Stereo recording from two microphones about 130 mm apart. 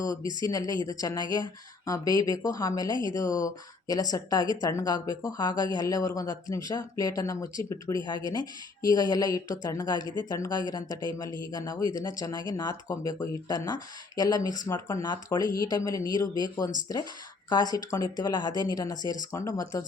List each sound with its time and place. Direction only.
0.1 s speech: 30° left (ahead or behind)